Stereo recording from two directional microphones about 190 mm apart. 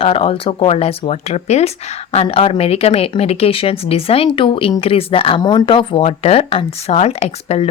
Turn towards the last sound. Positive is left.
turn(degrees=30)  # may be behind; listen again after turning